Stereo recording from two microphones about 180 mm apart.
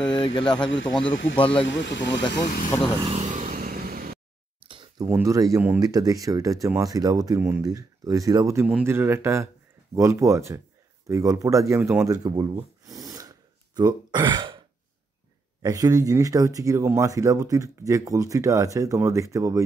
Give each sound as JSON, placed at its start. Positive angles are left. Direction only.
{"t": 0.0, "sound": "speech", "side_deg": 30}
{"t": 0.7, "sound": "speech", "side_deg": 90}
{"t": 1.4, "sound": "speech", "side_deg": 30}
{"t": 1.7, "sound": "speech", "side_deg": 85}
{"t": 2.4, "sound": "speech", "side_deg": 45}
{"t": 3.1, "sound": "vehicle", "side_deg": -40}
{"t": 4.6, "sound": "a sound", "side_deg": -25}
{"t": 5.0, "sound": "speech", "side_deg": -10}
{"t": 12.1, "sound": "a sound", "side_deg": -20}
{"t": 13.7, "sound": "speech", "side_deg": -25}
{"t": 15.6, "sound": "speech", "side_deg": -20}